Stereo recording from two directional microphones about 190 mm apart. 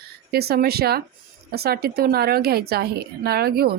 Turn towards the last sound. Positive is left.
turn(degrees=-55)  # may be behind; listen again after turning